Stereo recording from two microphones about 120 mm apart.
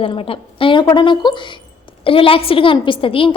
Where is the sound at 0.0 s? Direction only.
50° left (ahead or behind).